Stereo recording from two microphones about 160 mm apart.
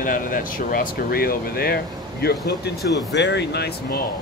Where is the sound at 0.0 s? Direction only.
60° left (ahead or behind).